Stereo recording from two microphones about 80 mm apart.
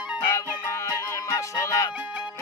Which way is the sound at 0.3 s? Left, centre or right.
Left.